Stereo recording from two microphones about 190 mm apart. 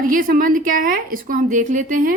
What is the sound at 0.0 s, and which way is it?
A woman's voice, 45° right (ahead or behind).